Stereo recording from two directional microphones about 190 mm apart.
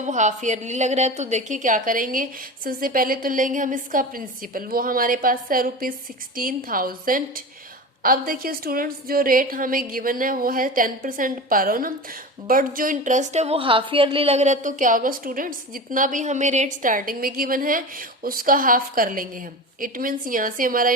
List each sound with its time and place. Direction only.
0.0 s a woman's voice: 40° right (ahead or behind)